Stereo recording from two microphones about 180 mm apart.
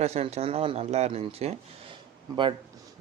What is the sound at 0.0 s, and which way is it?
Speech, 35° right (ahead or behind).